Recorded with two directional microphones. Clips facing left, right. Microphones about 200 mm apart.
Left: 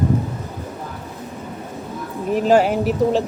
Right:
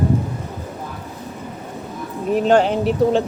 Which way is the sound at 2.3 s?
Centre (ahead or behind).